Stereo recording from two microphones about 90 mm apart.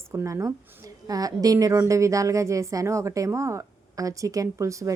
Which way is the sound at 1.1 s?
40° right (ahead or behind).